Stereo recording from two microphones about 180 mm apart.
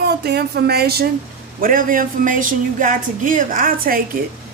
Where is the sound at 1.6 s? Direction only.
50° right (ahead or behind).